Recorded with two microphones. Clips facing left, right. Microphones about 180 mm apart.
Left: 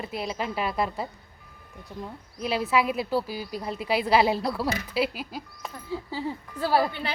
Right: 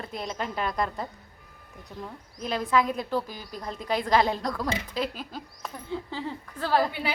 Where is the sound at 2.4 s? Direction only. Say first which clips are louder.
Left 1 dB; 10° left (ahead or behind).